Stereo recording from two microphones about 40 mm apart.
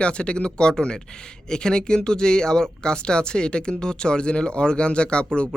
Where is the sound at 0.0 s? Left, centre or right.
Left.